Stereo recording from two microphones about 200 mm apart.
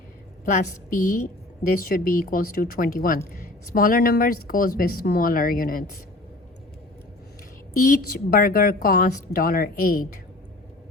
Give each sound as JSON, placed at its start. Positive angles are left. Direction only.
{"t": 0.4, "sound": "a woman's voice", "side_deg": 40}
{"t": 7.9, "sound": "a woman's voice", "side_deg": 45}